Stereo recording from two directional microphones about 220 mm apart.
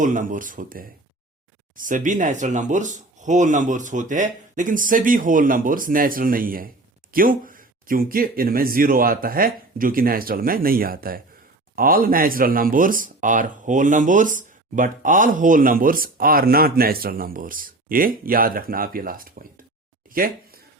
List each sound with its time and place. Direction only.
0.0 s speech: 35° right (ahead or behind)